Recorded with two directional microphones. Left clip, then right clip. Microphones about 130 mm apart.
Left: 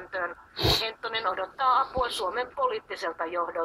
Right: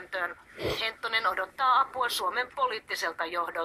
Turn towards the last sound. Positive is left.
turn(degrees=-40)  # may be behind; listen again after turning